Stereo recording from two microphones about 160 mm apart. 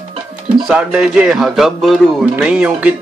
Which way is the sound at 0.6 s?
5° right (ahead or behind).